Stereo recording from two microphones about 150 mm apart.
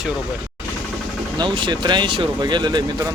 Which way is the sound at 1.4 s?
30° right (ahead or behind).